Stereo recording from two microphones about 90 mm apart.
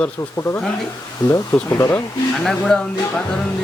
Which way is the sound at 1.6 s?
30° left (ahead or behind).